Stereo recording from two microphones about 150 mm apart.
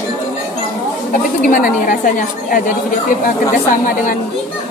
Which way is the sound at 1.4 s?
65° left (ahead or behind).